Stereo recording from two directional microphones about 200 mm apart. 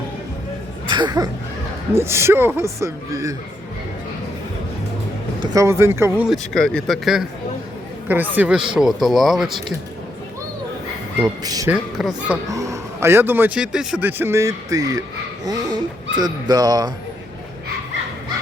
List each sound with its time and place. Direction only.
0.9 s a sound: 20° right (ahead or behind)
1.9 s a man's voice: 10° right (ahead or behind)
5.4 s a man's voice: 15° right (ahead or behind)
11.2 s a man's voice: 15° right (ahead or behind)
11.7 s speech: 5° right (ahead or behind)
12.5 s a man's voice: 15° right (ahead or behind)
16.1 s speech: 20° right (ahead or behind)